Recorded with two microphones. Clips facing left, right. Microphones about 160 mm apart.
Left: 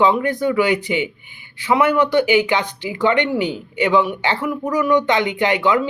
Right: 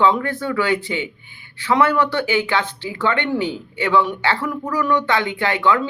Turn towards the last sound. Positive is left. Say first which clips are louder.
# left 2 dB
turn(degrees=15)  # may be behind; listen again after turning